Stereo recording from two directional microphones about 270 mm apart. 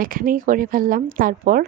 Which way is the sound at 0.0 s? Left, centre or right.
Right.